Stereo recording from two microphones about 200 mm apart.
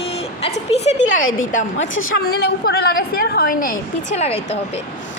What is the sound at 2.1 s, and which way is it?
A woman's voice, 50° left (ahead or behind).